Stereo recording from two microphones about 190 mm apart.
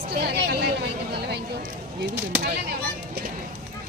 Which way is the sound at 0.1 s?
55° right (ahead or behind).